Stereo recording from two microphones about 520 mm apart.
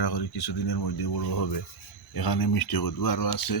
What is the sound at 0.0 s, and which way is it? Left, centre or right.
Speech, left.